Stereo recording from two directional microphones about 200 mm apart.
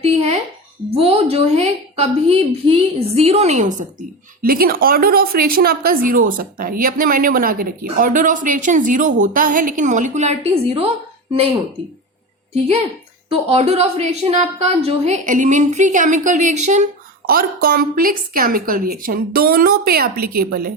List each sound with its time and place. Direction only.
0.0 s a sound: 30° right (ahead or behind)
0.9 s a woman's voice: 30° right (ahead or behind)
13.5 s a woman's voice: 30° right (ahead or behind)
17.2 s a woman's voice: 45° right (ahead or behind)